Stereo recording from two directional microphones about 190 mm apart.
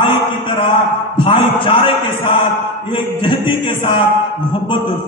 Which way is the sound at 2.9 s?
25° left (ahead or behind).